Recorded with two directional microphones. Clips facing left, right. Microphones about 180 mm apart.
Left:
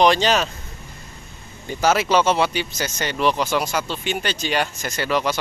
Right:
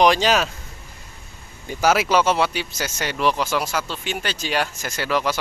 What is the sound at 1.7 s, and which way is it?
Speech, 5° right (ahead or behind).